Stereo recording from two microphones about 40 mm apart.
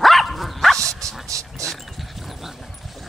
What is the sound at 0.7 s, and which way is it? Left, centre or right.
Dog, centre.